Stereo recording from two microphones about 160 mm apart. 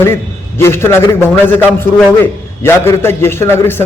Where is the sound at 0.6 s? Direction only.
15° left (ahead or behind).